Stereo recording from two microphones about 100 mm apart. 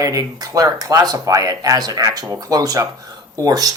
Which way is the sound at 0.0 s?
35° right (ahead or behind).